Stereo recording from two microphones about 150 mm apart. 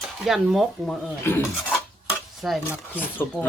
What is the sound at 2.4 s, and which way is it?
Speech, centre (ahead or behind).